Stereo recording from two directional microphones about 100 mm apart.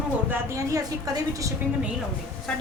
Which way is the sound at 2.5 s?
5° left (ahead or behind).